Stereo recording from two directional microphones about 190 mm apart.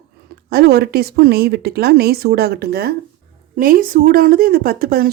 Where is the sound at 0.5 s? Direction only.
55° right (ahead or behind).